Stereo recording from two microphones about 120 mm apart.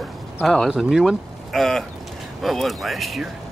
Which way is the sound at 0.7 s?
5° right (ahead or behind).